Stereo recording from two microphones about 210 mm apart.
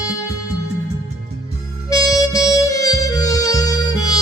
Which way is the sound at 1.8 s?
15° left (ahead or behind).